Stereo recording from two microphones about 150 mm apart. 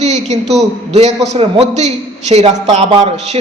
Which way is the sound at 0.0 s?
50° right (ahead or behind).